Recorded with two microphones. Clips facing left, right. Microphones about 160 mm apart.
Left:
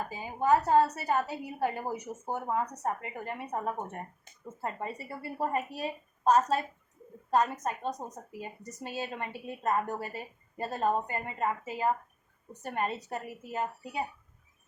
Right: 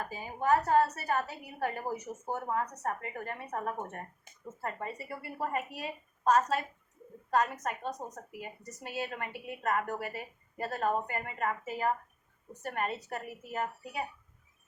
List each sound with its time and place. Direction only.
0.1 s a woman's voice: 20° left (ahead or behind)